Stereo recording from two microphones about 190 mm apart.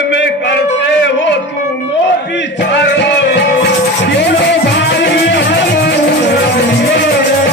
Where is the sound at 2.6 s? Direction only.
65° left (ahead or behind).